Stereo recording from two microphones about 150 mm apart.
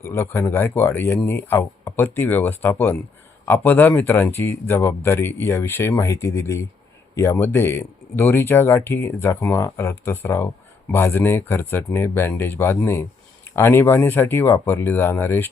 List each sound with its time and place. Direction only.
0.1 s speech: 15° left (ahead or behind)